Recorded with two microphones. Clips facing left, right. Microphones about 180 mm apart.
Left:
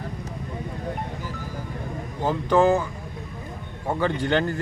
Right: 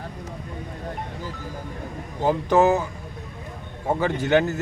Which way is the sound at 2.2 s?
15° right (ahead or behind).